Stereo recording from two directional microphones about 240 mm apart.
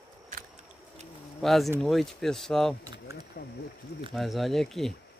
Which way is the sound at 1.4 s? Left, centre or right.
Centre.